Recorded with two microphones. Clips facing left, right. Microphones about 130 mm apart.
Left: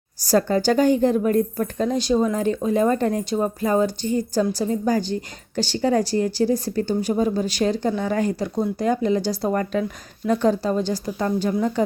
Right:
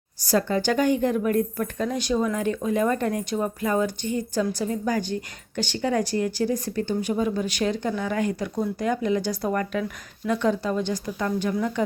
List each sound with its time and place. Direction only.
0.2 s speech: 40° left (ahead or behind)